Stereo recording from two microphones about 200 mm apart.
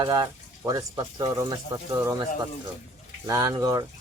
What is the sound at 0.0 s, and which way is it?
Speech, 20° right (ahead or behind).